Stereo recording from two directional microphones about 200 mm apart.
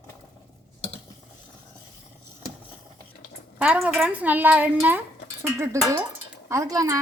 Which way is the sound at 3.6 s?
5° right (ahead or behind).